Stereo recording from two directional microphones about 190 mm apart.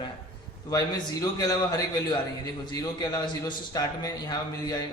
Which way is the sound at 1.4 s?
20° left (ahead or behind).